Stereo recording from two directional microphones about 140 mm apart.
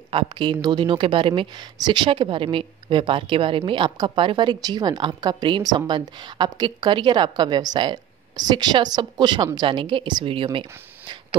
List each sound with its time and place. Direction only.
0.1 s speech: 35° right (ahead or behind)